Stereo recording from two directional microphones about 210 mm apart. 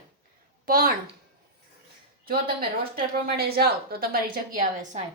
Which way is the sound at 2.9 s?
45° right (ahead or behind).